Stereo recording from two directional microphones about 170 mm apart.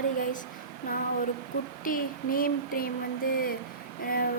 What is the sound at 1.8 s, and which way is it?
Speech, 55° left (ahead or behind).